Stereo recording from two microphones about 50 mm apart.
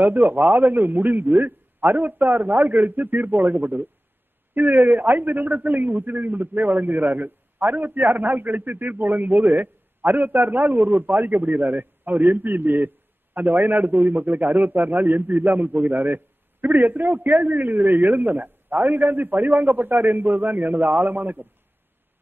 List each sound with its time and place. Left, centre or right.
0.0 s a man's voice: right